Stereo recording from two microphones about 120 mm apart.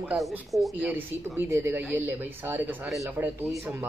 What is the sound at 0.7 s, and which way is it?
Speech, 15° right (ahead or behind).